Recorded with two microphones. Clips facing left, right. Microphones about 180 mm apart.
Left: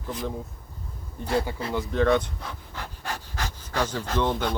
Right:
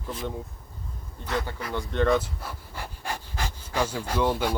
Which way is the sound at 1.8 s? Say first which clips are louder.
Left 1 dB; centre (ahead or behind).